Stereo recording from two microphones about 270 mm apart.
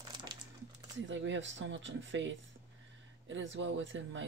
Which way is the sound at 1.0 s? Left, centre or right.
Right.